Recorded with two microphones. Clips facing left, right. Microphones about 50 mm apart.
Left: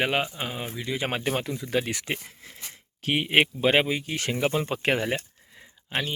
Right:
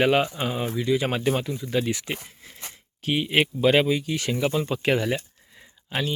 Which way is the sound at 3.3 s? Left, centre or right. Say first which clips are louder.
Right 1 dB; left.